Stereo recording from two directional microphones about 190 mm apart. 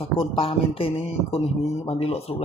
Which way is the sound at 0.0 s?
30° left (ahead or behind).